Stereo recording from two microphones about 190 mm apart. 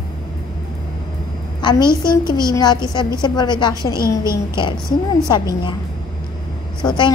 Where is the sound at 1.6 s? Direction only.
25° left (ahead or behind).